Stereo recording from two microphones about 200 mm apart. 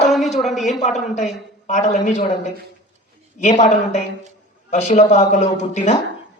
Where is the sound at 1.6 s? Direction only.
35° left (ahead or behind).